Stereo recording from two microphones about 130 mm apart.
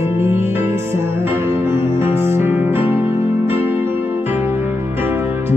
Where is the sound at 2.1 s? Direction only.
20° right (ahead or behind).